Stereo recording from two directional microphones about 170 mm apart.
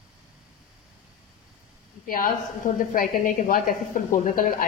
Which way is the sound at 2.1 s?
55° left (ahead or behind).